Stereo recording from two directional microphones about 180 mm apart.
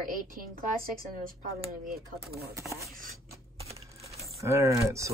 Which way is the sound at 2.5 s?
15° right (ahead or behind).